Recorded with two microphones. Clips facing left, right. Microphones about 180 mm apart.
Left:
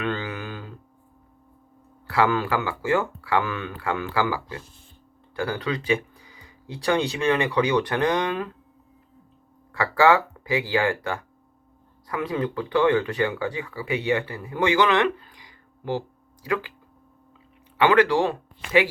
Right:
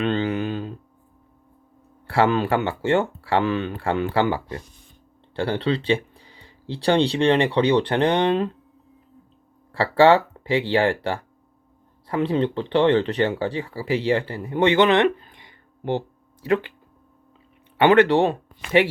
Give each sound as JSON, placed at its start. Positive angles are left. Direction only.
{"t": 0.0, "sound": "a sound", "side_deg": -25}
{"t": 2.0, "sound": "speech", "side_deg": -30}
{"t": 9.7, "sound": "speech", "side_deg": -30}
{"t": 17.8, "sound": "speech", "side_deg": -25}